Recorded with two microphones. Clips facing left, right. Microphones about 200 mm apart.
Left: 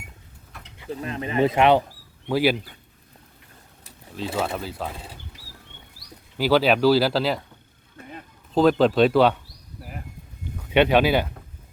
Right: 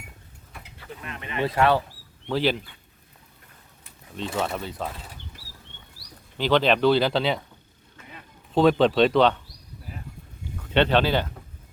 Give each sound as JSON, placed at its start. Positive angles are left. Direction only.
{"t": 0.9, "sound": "speech", "side_deg": 35}
{"t": 1.5, "sound": "speech", "side_deg": 20}
{"t": 2.2, "sound": "speech", "side_deg": 10}
{"t": 4.4, "sound": "speech", "side_deg": 0}
{"t": 6.3, "sound": "speech", "side_deg": 5}
{"t": 8.5, "sound": "speech", "side_deg": 0}
{"t": 10.6, "sound": "speech", "side_deg": 10}